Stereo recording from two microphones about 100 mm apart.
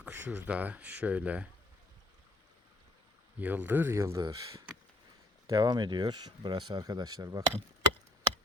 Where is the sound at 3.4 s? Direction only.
15° right (ahead or behind).